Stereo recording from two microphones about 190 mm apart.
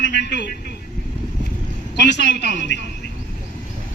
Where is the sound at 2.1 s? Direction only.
65° left (ahead or behind).